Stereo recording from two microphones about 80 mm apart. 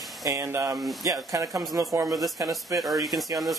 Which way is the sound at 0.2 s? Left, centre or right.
Right.